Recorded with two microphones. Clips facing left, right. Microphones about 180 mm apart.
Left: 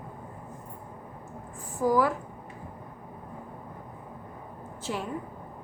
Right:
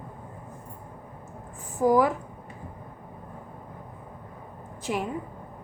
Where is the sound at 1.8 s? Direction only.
20° right (ahead or behind).